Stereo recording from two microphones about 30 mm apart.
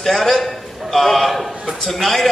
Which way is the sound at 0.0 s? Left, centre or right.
Centre.